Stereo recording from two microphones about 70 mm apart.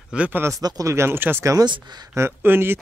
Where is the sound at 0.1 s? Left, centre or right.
Centre.